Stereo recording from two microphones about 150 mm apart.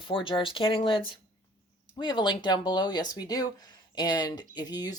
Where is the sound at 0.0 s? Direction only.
35° left (ahead or behind).